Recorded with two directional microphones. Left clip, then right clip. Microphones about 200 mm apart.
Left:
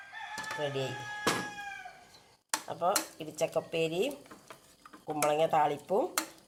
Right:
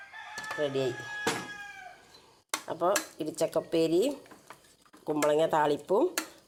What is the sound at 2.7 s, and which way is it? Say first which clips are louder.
Speech: right 3 dB; 45° right (ahead or behind).